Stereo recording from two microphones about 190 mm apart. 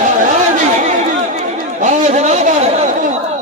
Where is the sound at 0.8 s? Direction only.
40° right (ahead or behind).